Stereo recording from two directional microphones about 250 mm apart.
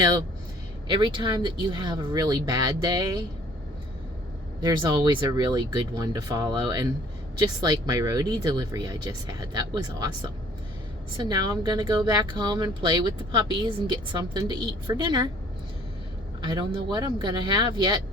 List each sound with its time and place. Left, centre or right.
0.9 s speech: centre
4.6 s speech: centre
11.2 s speech: centre
16.4 s speech: centre